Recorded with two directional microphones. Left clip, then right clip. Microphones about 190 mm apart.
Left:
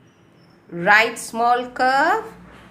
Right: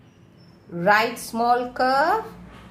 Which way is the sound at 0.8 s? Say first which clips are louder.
Left 4 dB; 10° left (ahead or behind).